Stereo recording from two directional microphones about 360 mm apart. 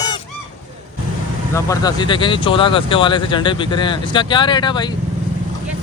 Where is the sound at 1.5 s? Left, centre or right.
Centre.